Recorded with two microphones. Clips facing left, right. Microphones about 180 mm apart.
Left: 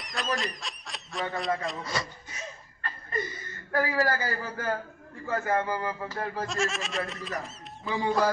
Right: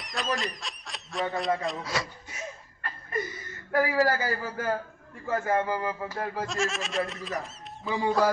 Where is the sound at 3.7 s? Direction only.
10° right (ahead or behind).